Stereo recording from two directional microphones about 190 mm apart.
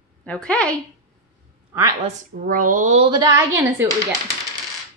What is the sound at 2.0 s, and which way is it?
A woman's voice, 45° right (ahead or behind).